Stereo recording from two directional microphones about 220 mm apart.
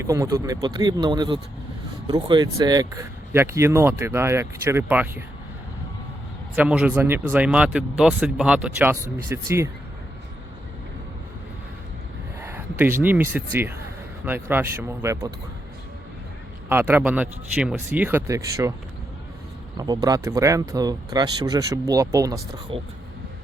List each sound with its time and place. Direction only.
0.0 s speech: 15° right (ahead or behind)
6.6 s speech: 5° right (ahead or behind)
12.4 s speech: 10° right (ahead or behind)
16.6 s speech: 10° right (ahead or behind)
19.7 s speech: 15° right (ahead or behind)